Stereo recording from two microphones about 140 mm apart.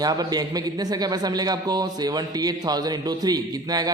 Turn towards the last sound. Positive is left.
turn(degrees=-25)  # may be behind; listen again after turning